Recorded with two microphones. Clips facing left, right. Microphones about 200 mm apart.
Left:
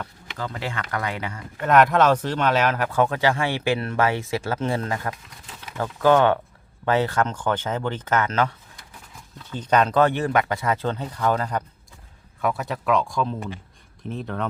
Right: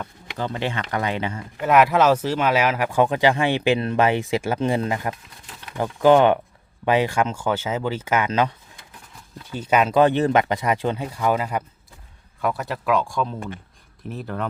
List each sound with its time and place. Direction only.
0.3 s speech: 25° right (ahead or behind)
1.5 s speech: 5° right (ahead or behind)
5.1 s crumpling: 5° left (ahead or behind)
5.7 s speech: 15° right (ahead or behind)